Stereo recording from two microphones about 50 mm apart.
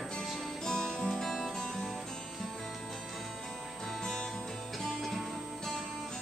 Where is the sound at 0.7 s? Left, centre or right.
Centre.